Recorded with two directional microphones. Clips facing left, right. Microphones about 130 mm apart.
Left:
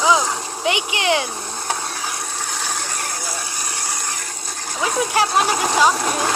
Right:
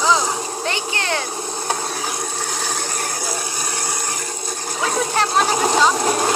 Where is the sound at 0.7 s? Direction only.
15° left (ahead or behind).